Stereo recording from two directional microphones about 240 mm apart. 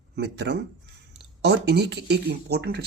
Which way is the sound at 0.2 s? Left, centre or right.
Right.